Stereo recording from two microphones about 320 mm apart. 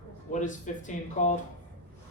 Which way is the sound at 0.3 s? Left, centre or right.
Left.